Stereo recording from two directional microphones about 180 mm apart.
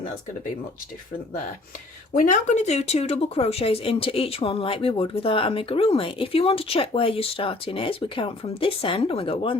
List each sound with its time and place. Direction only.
2.1 s speech: 45° left (ahead or behind)